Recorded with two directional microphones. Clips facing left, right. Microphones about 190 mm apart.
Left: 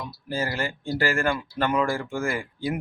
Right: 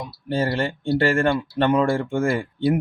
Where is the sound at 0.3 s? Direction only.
30° right (ahead or behind).